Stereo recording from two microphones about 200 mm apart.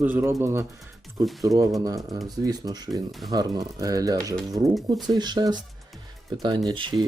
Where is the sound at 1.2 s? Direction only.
Centre (ahead or behind).